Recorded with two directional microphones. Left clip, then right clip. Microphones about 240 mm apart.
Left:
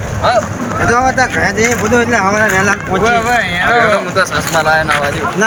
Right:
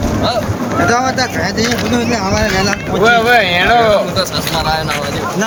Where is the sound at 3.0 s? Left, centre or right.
Right.